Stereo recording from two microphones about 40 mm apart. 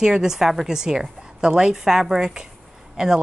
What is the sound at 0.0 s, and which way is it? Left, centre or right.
A woman's voice, centre.